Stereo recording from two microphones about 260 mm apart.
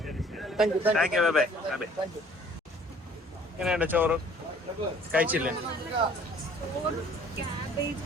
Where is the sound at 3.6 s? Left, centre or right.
Centre.